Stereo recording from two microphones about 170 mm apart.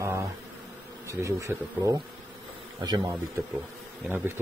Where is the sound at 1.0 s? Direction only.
15° right (ahead or behind).